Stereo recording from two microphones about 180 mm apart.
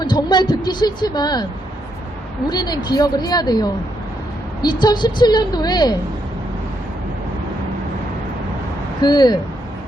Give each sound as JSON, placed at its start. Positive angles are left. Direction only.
{"t": 0.0, "sound": "a woman's voice", "side_deg": 25}
{"t": 2.5, "sound": "a woman's voice", "side_deg": 25}
{"t": 9.0, "sound": "speech", "side_deg": 25}